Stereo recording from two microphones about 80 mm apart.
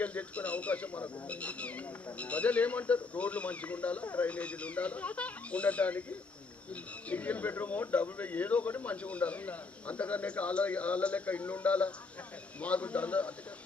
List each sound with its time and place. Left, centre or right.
0.0 s speech: centre